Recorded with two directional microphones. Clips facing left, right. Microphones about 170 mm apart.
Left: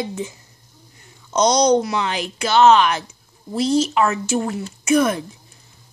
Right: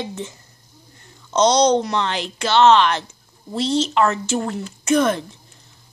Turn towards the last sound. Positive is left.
turn(degrees=10)  # may be behind; listen again after turning